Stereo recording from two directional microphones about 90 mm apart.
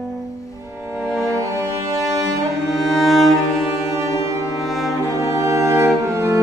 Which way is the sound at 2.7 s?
Centre (ahead or behind).